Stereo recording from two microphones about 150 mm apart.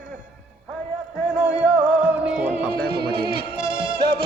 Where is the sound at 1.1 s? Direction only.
5° right (ahead or behind).